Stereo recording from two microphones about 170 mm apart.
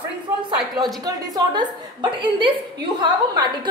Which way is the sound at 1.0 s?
20° right (ahead or behind).